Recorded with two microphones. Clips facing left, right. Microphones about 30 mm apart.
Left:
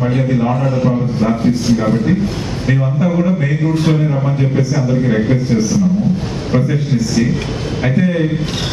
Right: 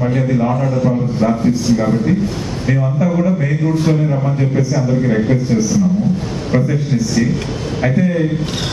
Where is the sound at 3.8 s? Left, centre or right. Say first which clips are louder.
Left 1 dB; left.